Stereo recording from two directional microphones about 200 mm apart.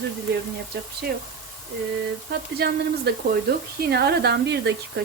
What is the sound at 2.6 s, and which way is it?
A woman's voice, 50° right (ahead or behind).